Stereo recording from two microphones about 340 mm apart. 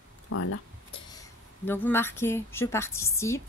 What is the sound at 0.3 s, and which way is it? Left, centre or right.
Speech, left.